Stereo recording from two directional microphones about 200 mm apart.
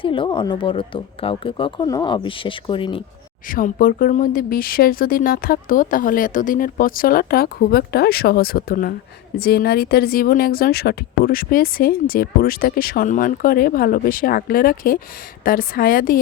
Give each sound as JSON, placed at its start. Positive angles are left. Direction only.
{"t": 0.0, "sound": "speech", "side_deg": 25}
{"t": 3.5, "sound": "a woman's voice", "side_deg": 45}